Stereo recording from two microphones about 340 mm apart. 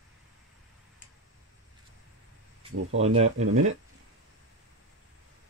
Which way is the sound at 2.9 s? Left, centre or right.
Centre.